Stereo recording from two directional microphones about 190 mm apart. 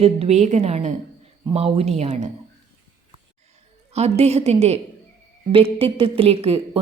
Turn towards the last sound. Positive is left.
turn(degrees=-30)  # may be behind; listen again after turning